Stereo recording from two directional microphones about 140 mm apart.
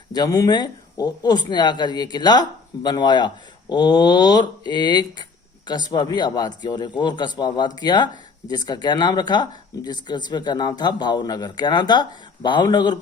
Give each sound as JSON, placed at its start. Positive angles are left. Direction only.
{"t": 0.1, "sound": "speech", "side_deg": 25}